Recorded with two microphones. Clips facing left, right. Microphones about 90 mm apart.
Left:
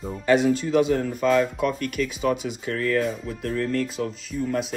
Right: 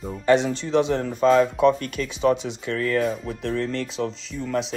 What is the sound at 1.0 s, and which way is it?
Speech, 35° right (ahead or behind).